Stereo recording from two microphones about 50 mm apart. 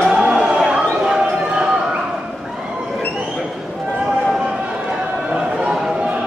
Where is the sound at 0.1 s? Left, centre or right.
Centre.